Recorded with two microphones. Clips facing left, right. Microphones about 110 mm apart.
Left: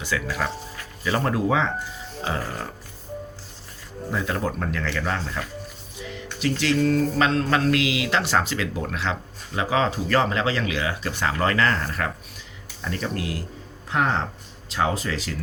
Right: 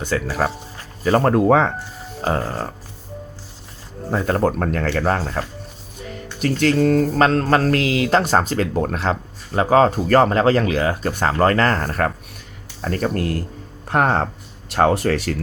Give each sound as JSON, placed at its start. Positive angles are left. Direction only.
{"t": 0.0, "sound": "speech", "side_deg": -40}
{"t": 2.2, "sound": "speech", "side_deg": -40}
{"t": 4.1, "sound": "speech", "side_deg": -45}
{"t": 6.0, "sound": "music", "side_deg": -45}
{"t": 6.4, "sound": "speech", "side_deg": -45}